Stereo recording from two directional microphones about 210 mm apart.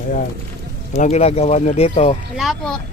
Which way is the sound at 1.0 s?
30° left (ahead or behind).